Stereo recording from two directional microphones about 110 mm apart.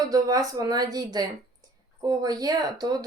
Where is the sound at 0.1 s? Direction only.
35° right (ahead or behind).